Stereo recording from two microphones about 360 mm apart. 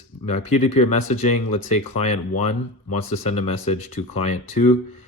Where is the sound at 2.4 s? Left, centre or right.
Left.